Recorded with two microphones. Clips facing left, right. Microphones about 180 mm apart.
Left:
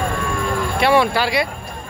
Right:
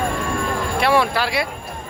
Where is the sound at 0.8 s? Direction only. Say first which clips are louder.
Left 2 dB; centre (ahead or behind).